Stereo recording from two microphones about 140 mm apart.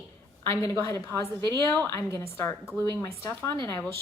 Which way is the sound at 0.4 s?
20° left (ahead or behind).